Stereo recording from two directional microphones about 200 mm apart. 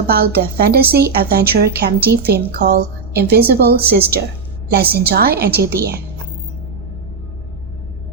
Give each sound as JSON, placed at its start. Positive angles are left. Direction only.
{"t": 0.1, "sound": "a woman's voice", "side_deg": -50}